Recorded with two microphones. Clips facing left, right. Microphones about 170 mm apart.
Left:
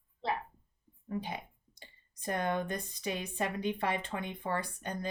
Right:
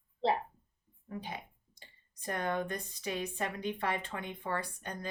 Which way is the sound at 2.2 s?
20° left (ahead or behind).